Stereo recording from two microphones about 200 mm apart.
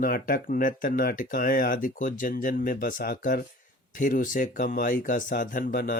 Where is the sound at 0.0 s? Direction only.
45° left (ahead or behind).